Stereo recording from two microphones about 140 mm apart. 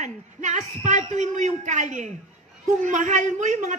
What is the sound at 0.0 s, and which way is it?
A woman's voice, 55° right (ahead or behind).